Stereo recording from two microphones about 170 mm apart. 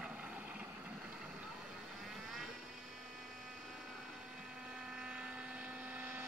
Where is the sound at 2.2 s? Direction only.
Centre (ahead or behind).